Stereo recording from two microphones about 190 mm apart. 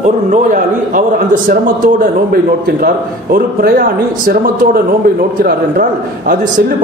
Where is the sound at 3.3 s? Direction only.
50° right (ahead or behind).